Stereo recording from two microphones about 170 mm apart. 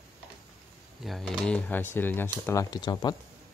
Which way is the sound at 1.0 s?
Centre (ahead or behind).